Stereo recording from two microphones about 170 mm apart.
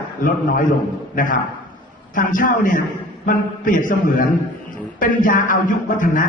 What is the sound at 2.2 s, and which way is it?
A man's voice, 50° left (ahead or behind).